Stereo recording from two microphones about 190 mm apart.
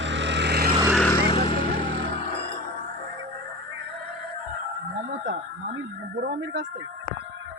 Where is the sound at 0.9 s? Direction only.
5° left (ahead or behind).